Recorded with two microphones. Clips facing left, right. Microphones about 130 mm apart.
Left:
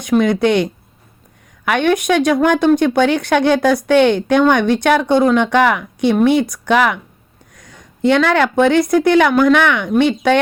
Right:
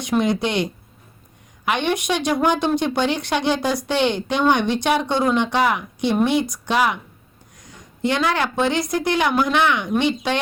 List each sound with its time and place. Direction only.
0.2 s speech: 55° left (ahead or behind)